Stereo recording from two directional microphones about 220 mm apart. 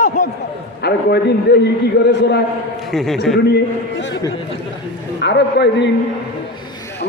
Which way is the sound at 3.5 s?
55° left (ahead or behind).